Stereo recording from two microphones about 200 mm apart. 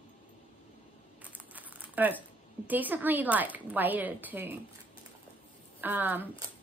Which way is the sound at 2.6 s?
10° right (ahead or behind).